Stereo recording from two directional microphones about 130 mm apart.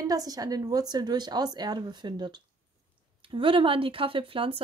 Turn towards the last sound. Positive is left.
turn(degrees=-45)  # may be behind; listen again after turning